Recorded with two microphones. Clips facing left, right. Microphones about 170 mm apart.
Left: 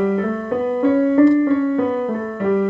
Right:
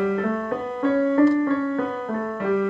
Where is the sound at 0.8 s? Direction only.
15° left (ahead or behind).